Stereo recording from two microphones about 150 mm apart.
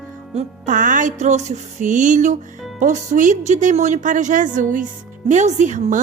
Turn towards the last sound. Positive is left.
turn(degrees=-55)  # may be behind; listen again after turning